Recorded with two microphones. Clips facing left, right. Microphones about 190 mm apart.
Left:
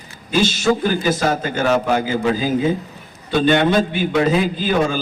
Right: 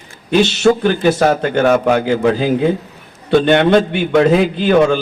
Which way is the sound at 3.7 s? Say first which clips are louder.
Right 5 dB; 60° right (ahead or behind).